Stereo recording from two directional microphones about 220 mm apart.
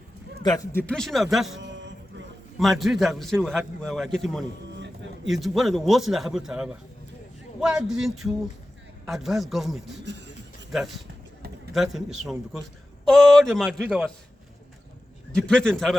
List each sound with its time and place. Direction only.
0.4 s a man's voice: 15° left (ahead or behind); by 1.5 s centre (ahead or behind)
1.5 s a sound: 55° right (ahead or behind)
2.6 s a man's voice: centre (ahead or behind)
10.0 s a sound: 50° right (ahead or behind)
10.7 s a man's voice: centre (ahead or behind)
15.4 s a man's voice: 5° left (ahead or behind)